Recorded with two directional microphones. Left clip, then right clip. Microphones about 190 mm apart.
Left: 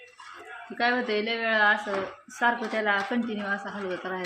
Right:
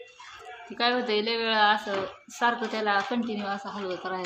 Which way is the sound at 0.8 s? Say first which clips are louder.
Even; centre (ahead or behind).